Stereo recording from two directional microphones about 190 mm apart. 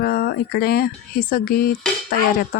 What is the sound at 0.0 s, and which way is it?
Speech, 55° left (ahead or behind).